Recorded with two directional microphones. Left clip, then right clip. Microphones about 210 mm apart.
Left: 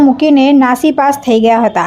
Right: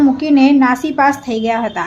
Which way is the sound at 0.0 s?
35° left (ahead or behind).